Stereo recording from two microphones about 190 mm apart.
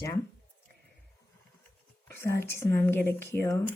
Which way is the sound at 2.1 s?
15° left (ahead or behind).